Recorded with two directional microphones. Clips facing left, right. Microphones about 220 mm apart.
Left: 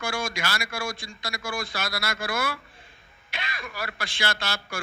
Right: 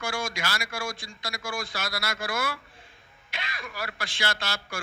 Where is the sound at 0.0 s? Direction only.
60° left (ahead or behind).